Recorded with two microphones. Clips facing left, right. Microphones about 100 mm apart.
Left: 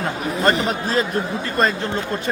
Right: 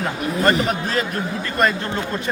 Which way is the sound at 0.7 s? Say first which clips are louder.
Left 2 dB; 30° left (ahead or behind).